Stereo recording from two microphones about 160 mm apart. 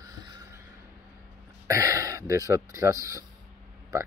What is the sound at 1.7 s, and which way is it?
Speech, 20° right (ahead or behind).